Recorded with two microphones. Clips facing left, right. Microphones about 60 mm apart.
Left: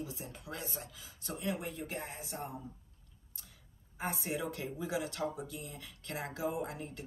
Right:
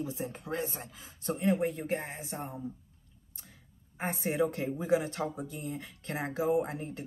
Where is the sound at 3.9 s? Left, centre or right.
Right.